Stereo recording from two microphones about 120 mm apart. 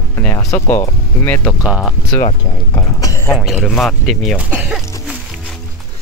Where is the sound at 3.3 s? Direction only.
Centre (ahead or behind).